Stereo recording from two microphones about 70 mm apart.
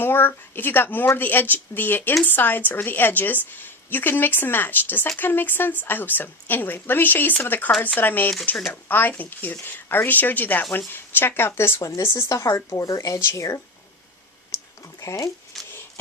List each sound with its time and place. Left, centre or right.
0.0 s a woman's voice: left
11.8 s speech: left
15.0 s speech: left
15.5 s a sound: centre